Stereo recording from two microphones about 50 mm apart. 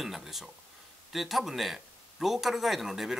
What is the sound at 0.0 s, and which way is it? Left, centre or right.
Speech, centre.